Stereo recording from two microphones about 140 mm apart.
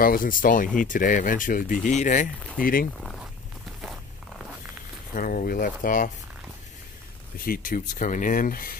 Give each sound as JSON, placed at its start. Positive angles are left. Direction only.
{"t": 0.0, "sound": "speech", "side_deg": 85}
{"t": 2.6, "sound": "speech", "side_deg": 90}
{"t": 5.1, "sound": "speech", "side_deg": 85}
{"t": 7.3, "sound": "speech", "side_deg": 90}
{"t": 7.9, "sound": "speech", "side_deg": 65}